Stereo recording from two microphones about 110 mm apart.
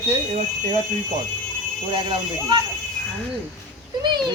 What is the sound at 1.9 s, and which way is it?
Speech, 45° right (ahead or behind).